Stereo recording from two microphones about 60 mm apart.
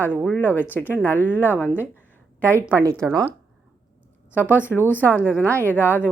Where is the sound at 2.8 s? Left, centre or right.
Right.